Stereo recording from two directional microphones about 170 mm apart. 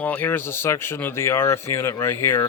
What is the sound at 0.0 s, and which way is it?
Speech, 10° left (ahead or behind).